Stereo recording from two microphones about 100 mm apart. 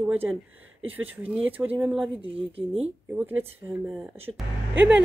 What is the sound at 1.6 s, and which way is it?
Speech, 20° right (ahead or behind).